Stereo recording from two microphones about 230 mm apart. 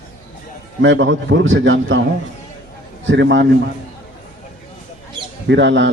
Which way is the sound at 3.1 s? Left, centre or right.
Right.